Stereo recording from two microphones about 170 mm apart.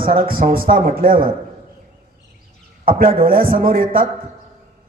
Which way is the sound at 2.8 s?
60° right (ahead or behind).